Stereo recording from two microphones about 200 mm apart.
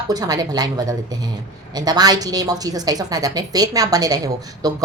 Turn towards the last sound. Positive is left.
turn(degrees=-20)  # may be behind; listen again after turning